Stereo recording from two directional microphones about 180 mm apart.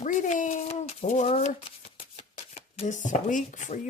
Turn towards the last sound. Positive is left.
turn(degrees=40)  # may be behind; listen again after turning